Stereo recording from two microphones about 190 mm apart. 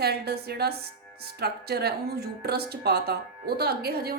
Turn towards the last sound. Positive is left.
turn(degrees=-55)  # may be behind; listen again after turning